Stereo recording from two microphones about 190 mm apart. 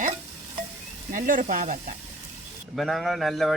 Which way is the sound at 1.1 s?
45° right (ahead or behind).